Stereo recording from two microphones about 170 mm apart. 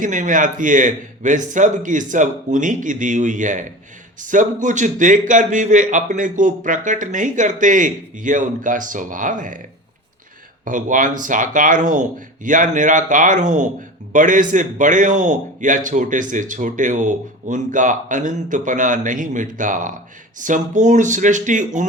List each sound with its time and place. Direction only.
0.0 s a man's voice: 50° right (ahead or behind)
10.7 s a man's voice: 50° right (ahead or behind)